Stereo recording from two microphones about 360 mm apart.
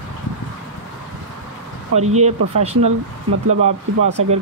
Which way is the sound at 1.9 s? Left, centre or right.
Right.